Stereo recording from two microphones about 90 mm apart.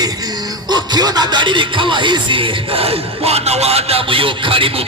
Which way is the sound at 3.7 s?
90° right.